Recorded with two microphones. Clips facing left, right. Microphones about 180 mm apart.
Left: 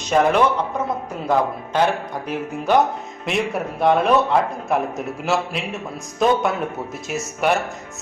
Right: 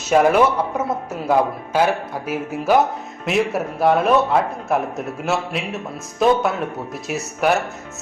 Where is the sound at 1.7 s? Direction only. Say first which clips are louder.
Right 1 dB; 5° right (ahead or behind).